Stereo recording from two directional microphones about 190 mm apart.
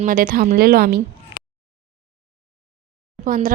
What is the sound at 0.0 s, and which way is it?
A woman's voice, 45° right (ahead or behind).